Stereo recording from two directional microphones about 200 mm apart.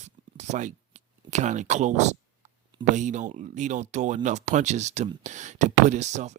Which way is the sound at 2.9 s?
35° right (ahead or behind).